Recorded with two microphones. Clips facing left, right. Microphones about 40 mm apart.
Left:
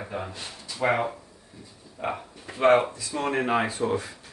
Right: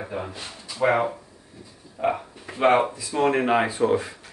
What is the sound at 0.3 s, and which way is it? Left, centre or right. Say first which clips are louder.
Speech: right 1 dB; centre.